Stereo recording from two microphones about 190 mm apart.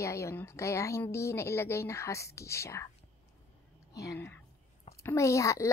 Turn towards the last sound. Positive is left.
turn(degrees=15)  # may be behind; listen again after turning